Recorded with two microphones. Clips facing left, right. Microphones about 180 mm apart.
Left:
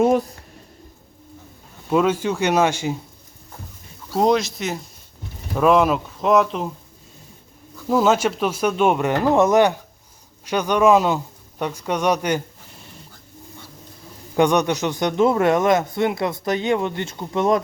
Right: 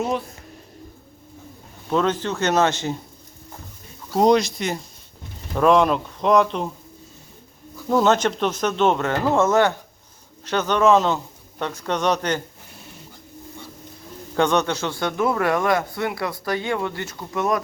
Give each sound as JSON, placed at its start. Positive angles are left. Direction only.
{"t": 0.0, "sound": "speech", "side_deg": 50}
{"t": 1.9, "sound": "speech", "side_deg": 10}
{"t": 4.1, "sound": "speech", "side_deg": 0}
{"t": 7.9, "sound": "speech", "side_deg": 5}
{"t": 14.3, "sound": "a man's voice", "side_deg": 15}